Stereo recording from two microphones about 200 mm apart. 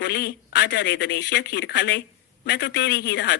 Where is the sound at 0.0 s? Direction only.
55° left (ahead or behind).